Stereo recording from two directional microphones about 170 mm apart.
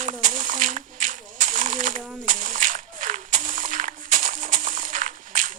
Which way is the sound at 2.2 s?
50° right (ahead or behind).